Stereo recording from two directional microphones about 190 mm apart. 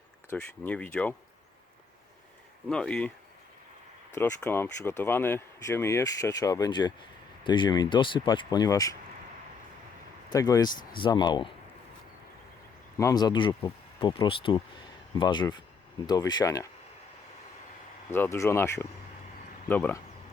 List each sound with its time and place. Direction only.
0.3 s speech: 5° left (ahead or behind)
2.6 s speech: 5° left (ahead or behind)
4.1 s speech: 10° left (ahead or behind)
10.3 s speech: 20° left (ahead or behind)
13.0 s speech: 20° left (ahead or behind)
18.1 s speech: 15° left (ahead or behind)